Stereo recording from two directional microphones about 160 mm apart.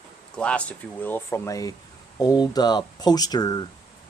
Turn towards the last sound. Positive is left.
turn(degrees=25)  # may be behind; listen again after turning